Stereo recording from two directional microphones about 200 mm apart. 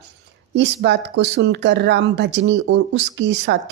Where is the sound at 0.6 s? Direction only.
60° right (ahead or behind).